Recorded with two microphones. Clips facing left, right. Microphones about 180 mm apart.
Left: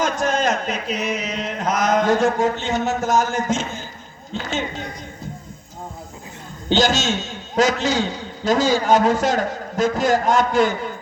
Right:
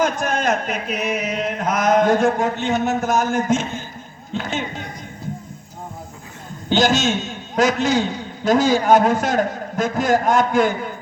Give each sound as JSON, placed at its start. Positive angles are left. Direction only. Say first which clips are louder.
{"t": 0.0, "sound": "chant", "louder": "even", "side_deg": -55}
{"t": 6.7, "sound": "a man's voice", "louder": "right 1 dB", "side_deg": -55}